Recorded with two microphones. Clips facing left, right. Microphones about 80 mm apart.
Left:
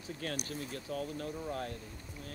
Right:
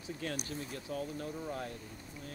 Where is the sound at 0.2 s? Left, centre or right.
Left.